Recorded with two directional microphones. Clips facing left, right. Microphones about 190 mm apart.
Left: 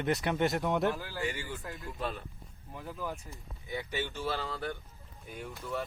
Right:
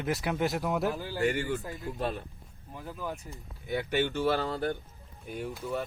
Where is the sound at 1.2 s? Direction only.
60° right (ahead or behind).